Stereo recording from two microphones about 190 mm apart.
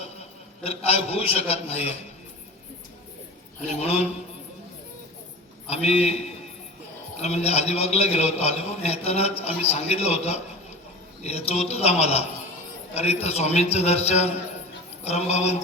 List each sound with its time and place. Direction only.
0.0 s a man's voice: 30° left (ahead or behind)
3.7 s a man's voice: 35° left (ahead or behind)
5.6 s a man's voice: 35° left (ahead or behind)
7.2 s a man's voice: 35° left (ahead or behind)